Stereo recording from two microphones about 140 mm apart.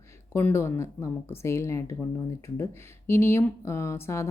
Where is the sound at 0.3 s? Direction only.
15° left (ahead or behind).